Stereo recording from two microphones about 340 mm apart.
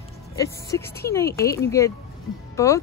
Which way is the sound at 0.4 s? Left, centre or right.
Centre.